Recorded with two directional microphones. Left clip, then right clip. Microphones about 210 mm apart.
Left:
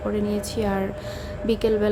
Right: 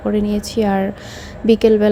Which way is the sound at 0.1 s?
25° right (ahead or behind).